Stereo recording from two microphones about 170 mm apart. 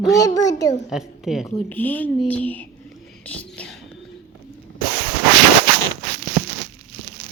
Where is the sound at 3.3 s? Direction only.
10° left (ahead or behind).